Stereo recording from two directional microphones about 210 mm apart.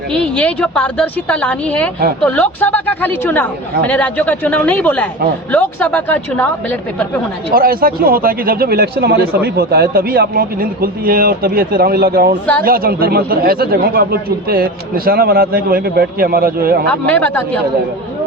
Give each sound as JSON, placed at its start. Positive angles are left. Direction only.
{"t": 0.1, "sound": "a woman's voice", "side_deg": 5}
{"t": 7.5, "sound": "speech", "side_deg": -45}
{"t": 16.9, "sound": "a woman's voice", "side_deg": 5}